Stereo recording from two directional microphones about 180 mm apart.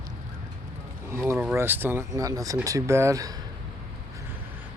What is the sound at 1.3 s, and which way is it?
Speech, 10° right (ahead or behind).